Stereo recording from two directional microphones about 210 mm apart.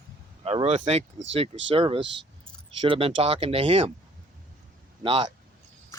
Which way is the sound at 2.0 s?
60° right (ahead or behind).